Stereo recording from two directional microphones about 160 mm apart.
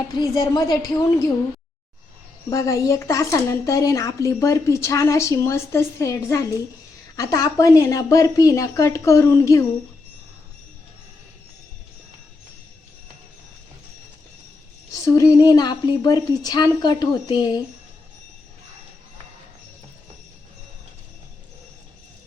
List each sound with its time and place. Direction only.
0.2 s speech: 25° left (ahead or behind)
2.5 s speech: 20° left (ahead or behind)
14.9 s speech: 20° left (ahead or behind)